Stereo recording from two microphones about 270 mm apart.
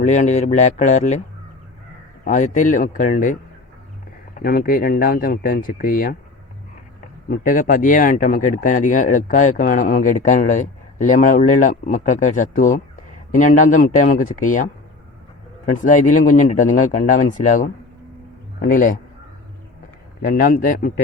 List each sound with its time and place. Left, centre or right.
0.0 s speech: left
2.2 s speech: left
4.4 s speech: left
7.3 s speech: left
15.8 s speech: left
20.3 s speech: left